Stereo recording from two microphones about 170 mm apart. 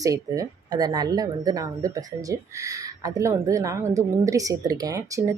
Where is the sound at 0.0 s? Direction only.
20° right (ahead or behind).